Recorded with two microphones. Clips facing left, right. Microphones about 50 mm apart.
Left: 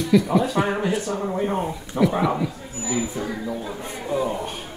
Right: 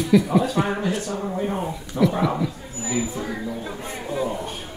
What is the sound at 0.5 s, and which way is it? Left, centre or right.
Speech, centre.